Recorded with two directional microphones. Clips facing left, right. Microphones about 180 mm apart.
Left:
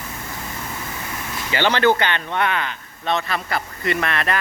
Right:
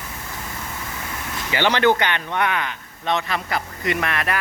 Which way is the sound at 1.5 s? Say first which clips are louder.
Even; 15° right (ahead or behind).